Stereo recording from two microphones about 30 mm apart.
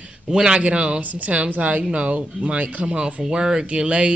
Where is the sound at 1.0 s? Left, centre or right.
Right.